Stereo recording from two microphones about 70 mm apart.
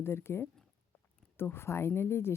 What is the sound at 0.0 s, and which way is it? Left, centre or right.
Speech, left.